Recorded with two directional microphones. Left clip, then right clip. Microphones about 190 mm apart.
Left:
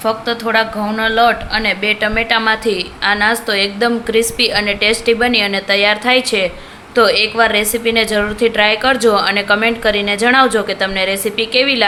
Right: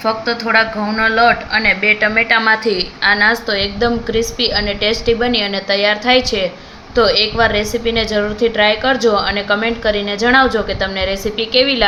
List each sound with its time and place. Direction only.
0.0 s speech: 5° left (ahead or behind)